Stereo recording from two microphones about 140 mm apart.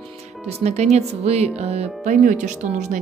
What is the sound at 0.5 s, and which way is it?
Speech, 50° right (ahead or behind).